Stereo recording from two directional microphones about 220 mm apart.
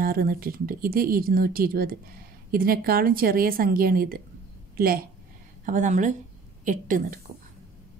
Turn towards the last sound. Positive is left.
turn(degrees=-35)  # may be behind; listen again after turning